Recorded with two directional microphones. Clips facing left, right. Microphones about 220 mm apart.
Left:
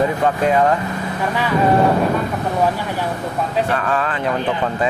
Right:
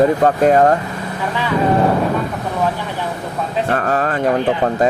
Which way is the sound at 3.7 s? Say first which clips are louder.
Right 3 dB; 40° right (ahead or behind).